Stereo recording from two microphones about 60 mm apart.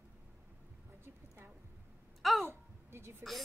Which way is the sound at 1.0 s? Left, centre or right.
Right.